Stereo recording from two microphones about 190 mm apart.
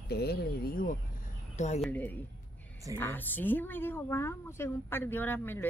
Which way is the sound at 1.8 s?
10° left (ahead or behind).